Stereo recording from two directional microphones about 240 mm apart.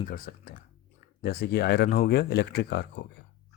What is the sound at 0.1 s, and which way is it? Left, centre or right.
Speech, left.